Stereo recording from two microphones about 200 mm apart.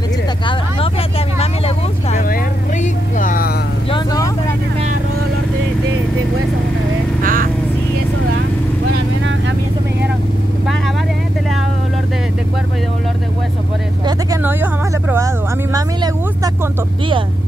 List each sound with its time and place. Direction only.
2.8 s vehicle: 40° left (ahead or behind)
3.9 s vehicle: 20° left (ahead or behind)
7.2 s vehicle: 45° right (ahead or behind)
14.0 s a sound: 15° right (ahead or behind)